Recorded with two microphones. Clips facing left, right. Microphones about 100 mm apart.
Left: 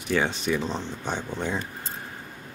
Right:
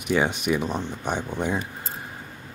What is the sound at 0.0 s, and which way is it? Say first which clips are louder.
Speech: right 2 dB; 15° right (ahead or behind).